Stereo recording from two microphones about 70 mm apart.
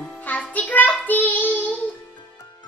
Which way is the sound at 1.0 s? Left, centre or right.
Left.